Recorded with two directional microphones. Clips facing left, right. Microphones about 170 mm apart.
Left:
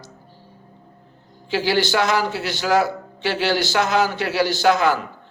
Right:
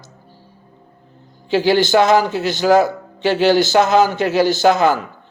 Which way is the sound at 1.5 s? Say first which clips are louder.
Right 6 dB; 20° right (ahead or behind).